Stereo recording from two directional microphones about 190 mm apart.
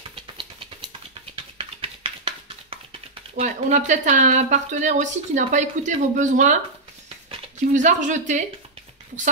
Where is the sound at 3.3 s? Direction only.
40° right (ahead or behind).